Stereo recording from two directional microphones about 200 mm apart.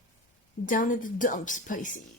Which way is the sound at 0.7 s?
40° left (ahead or behind).